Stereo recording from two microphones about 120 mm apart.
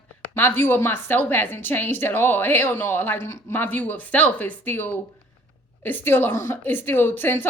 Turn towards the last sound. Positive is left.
turn(degrees=15)  # may be behind; listen again after turning